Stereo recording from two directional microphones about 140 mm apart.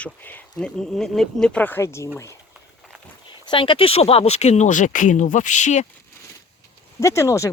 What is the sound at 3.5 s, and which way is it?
Speech, 35° left (ahead or behind).